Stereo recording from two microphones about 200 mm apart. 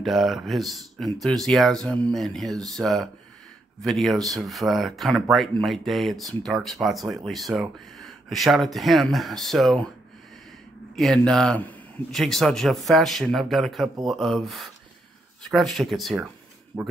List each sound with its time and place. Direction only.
0.0 s speech: centre (ahead or behind)
11.0 s speech: 5° left (ahead or behind)